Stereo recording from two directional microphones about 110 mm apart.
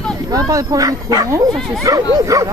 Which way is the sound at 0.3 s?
35° right (ahead or behind).